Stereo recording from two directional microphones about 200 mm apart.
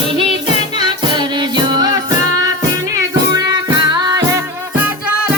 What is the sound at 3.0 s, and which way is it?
Music, 20° right (ahead or behind).